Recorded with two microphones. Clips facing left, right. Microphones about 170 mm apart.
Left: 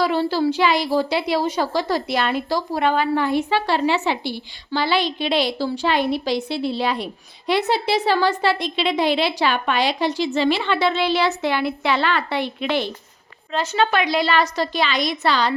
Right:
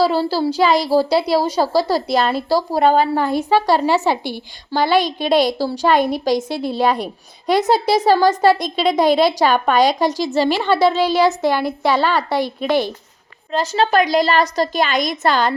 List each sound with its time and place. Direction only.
0.0 s a woman's voice: 35° right (ahead or behind)